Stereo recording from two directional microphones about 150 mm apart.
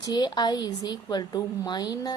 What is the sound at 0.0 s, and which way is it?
A woman's voice, 25° left (ahead or behind).